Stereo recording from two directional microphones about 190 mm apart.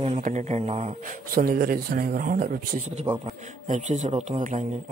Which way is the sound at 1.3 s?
50° right (ahead or behind).